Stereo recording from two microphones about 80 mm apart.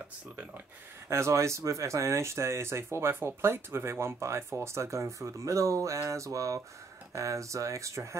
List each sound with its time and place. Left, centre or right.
1.0 s speech: right